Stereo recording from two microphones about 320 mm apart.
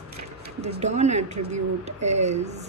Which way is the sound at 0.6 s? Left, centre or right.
Right.